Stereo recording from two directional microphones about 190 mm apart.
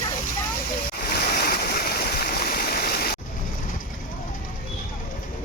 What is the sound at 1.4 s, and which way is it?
Stream, 55° left (ahead or behind).